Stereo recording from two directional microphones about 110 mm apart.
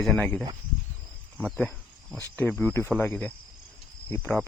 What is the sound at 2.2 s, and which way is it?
Speech, 15° left (ahead or behind).